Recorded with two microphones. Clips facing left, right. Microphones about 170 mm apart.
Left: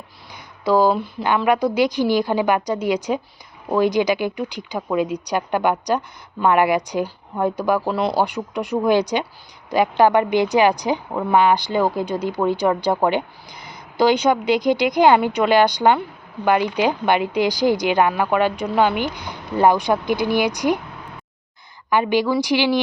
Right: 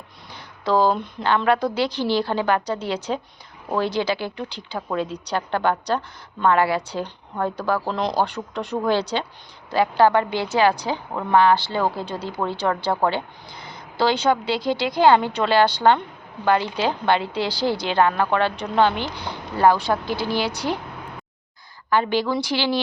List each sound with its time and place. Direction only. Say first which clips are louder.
0.6 s a woman's voice: left 3 dB; 10° left (ahead or behind)
21.8 s a woman's voice: left 3 dB; 15° left (ahead or behind)